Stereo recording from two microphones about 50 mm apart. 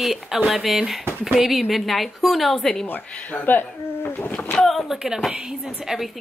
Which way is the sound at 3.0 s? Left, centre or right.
Left.